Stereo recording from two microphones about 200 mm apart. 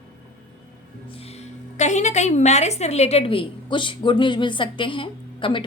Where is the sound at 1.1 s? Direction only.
30° left (ahead or behind).